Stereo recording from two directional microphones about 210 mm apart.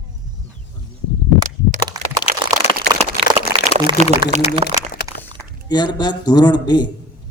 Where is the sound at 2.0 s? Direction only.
15° right (ahead or behind).